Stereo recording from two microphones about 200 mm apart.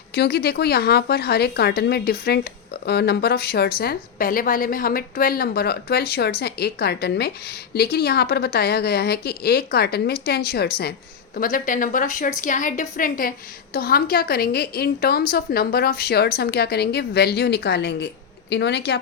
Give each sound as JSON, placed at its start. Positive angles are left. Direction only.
{"t": 0.1, "sound": "a woman's voice", "side_deg": 55}